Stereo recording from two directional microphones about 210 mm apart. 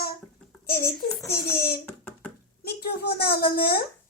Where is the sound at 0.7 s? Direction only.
45° left (ahead or behind).